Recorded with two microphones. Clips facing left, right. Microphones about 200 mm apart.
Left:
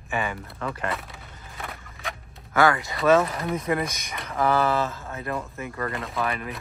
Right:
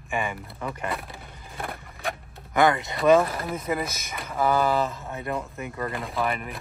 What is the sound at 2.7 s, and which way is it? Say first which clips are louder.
Speech: right 1 dB; centre (ahead or behind).